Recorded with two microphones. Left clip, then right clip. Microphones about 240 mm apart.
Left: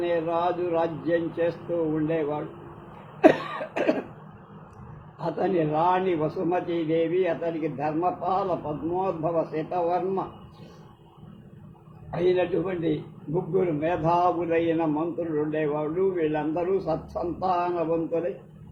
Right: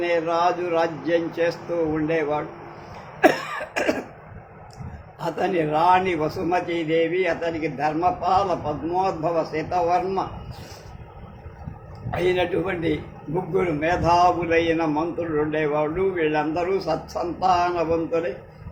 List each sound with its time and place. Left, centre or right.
0.0 s a man's voice: right
5.2 s a man's voice: right
12.1 s a man's voice: right